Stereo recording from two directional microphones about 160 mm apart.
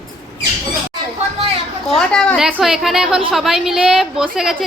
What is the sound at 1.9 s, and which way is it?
A woman's voice, 5° left (ahead or behind).